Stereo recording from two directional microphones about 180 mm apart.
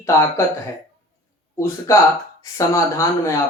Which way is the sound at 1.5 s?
15° left (ahead or behind).